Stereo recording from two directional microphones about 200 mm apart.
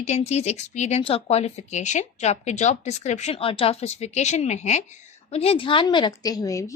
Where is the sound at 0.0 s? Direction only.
30° left (ahead or behind).